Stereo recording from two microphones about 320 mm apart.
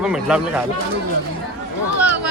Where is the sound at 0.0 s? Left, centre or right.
Centre.